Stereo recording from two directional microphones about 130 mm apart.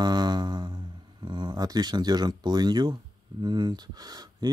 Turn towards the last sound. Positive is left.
turn(degrees=-30)  # may be behind; listen again after turning